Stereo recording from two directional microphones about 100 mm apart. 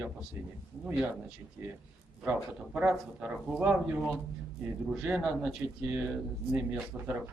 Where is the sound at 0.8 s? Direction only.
10° right (ahead or behind).